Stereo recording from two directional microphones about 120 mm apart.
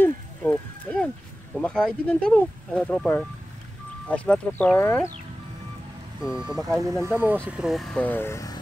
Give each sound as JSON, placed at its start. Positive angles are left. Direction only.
{"t": 0.0, "sound": "a sound", "side_deg": 10}
{"t": 1.6, "sound": "speech", "side_deg": 5}
{"t": 6.2, "sound": "speech", "side_deg": -5}
{"t": 6.8, "sound": "speech", "side_deg": -25}
{"t": 7.4, "sound": "speech", "side_deg": -5}
{"t": 8.0, "sound": "speech", "side_deg": 15}